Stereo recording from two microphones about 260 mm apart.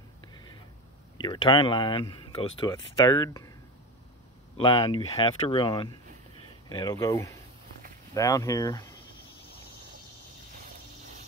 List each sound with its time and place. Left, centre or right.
1.1 s speech: centre
4.6 s speech: centre